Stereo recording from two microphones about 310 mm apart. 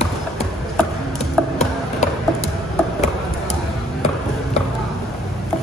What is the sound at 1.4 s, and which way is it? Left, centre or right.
Music, centre.